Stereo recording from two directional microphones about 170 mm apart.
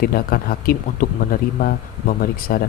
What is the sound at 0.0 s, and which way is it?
Speech, 60° left (ahead or behind).